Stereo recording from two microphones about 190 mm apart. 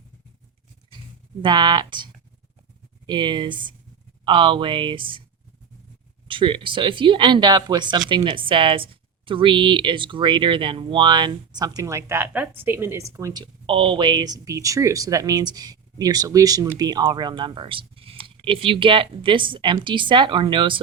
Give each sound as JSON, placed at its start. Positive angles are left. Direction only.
{"t": 1.4, "sound": "speech", "side_deg": -25}
{"t": 3.1, "sound": "speech", "side_deg": -25}
{"t": 6.2, "sound": "speech", "side_deg": -25}